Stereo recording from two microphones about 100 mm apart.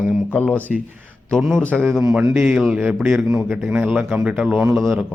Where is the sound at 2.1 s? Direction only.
10° right (ahead or behind).